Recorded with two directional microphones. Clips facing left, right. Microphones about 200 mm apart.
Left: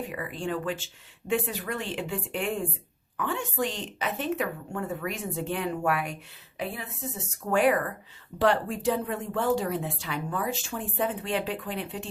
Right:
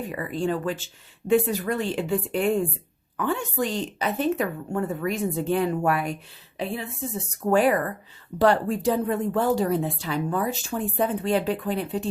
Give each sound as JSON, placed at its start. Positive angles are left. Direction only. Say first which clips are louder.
{"t": 0.1, "sound": "speech", "louder": "right 5 dB", "side_deg": -40}
{"t": 7.5, "sound": "speech", "louder": "right 3 dB", "side_deg": -35}